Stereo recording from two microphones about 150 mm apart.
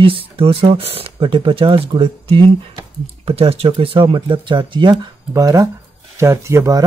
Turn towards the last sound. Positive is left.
turn(degrees=-20)  # may be behind; listen again after turning